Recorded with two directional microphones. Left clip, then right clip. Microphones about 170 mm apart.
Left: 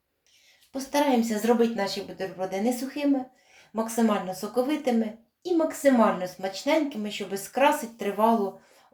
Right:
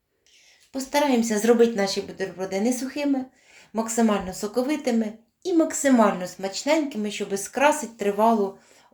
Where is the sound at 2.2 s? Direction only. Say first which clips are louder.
Even; 25° right (ahead or behind).